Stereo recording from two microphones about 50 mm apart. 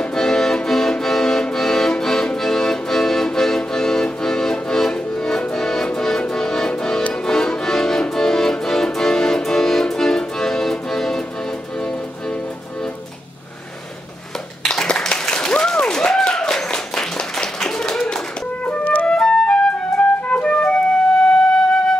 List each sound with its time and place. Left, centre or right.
0.0 s accordion: centre
5.9 s music: centre
14.7 s a sound: centre
16.1 s clapping: centre
18.7 s music: left